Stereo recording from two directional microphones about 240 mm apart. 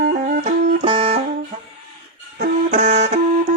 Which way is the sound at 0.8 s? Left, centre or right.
Right.